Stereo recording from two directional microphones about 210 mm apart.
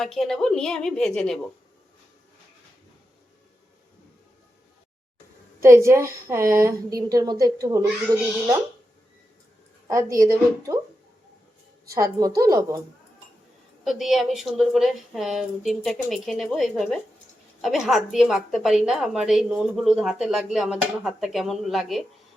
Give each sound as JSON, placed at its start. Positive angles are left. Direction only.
{"t": 0.0, "sound": "a woman's voice", "side_deg": 0}
{"t": 5.6, "sound": "a woman's voice", "side_deg": -15}
{"t": 9.9, "sound": "a woman's voice", "side_deg": -15}
{"t": 11.9, "sound": "a woman's voice", "side_deg": -15}
{"t": 13.8, "sound": "a woman's voice", "side_deg": 0}